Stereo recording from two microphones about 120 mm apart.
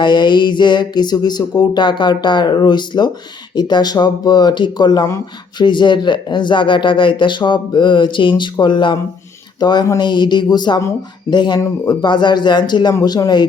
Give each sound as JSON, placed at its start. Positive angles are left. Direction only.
{"t": 0.0, "sound": "speech", "side_deg": 40}